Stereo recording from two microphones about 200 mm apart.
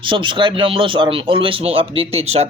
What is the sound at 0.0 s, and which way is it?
Speech, 25° right (ahead or behind).